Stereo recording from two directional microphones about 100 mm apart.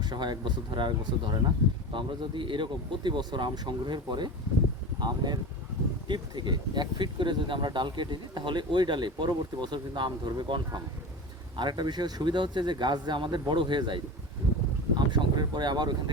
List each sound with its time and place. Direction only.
0.0 s speech: 45° right (ahead or behind)